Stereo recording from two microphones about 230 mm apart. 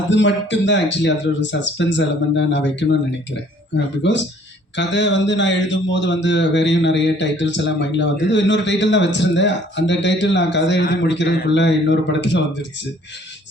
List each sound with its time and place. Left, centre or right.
0.1 s a man's voice: left
4.0 s a man's voice: left